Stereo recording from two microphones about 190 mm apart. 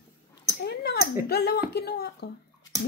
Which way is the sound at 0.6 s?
55° left (ahead or behind).